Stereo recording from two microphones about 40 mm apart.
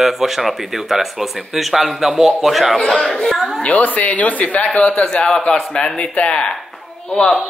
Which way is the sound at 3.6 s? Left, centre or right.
Left.